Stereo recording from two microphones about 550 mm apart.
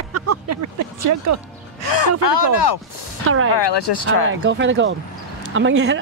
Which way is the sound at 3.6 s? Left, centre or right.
Left.